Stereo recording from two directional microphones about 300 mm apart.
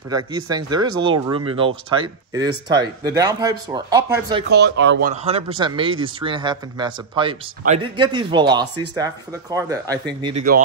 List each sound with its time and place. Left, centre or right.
0.1 s speech: centre
4.5 s speech: right
5.1 s speech: right
10.2 s speech: right